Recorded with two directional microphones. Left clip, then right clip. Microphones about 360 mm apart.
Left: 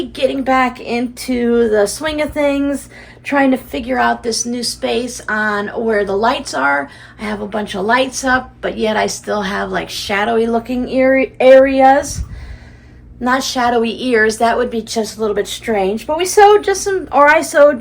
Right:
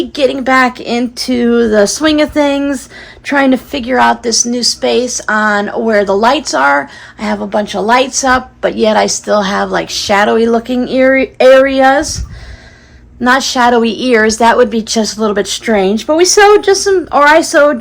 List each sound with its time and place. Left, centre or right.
0.2 s a woman's voice: right
13.2 s a woman's voice: right